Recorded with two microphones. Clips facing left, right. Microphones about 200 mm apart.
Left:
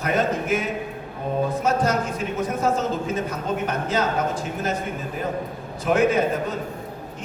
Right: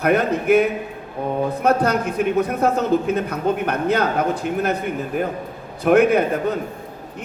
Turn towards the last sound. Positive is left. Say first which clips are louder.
# right 3 dB
turn(degrees=-60)  # may be behind; listen again after turning